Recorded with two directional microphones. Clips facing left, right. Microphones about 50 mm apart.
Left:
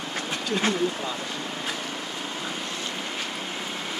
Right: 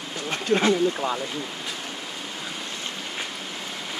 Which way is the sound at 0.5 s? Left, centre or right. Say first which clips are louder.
Right 6 dB; right.